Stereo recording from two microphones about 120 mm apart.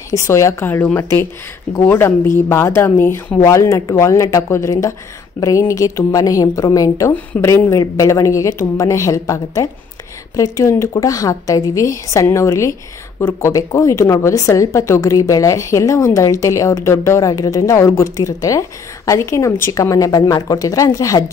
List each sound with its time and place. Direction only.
0.1 s a woman's voice: 25° left (ahead or behind)